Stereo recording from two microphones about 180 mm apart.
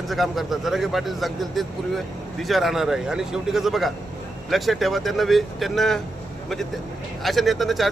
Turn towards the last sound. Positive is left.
turn(degrees=0)  # may be behind; listen again after turning